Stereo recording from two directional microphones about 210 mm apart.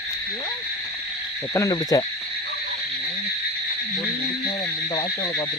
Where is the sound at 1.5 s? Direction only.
15° left (ahead or behind).